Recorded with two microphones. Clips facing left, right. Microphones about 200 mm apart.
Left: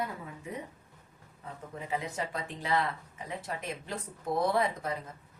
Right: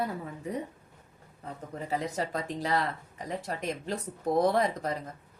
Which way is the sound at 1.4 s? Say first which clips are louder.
Right 3 dB; 40° right (ahead or behind).